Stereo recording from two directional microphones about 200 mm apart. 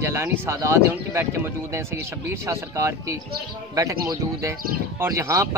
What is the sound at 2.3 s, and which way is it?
Speech, 15° right (ahead or behind).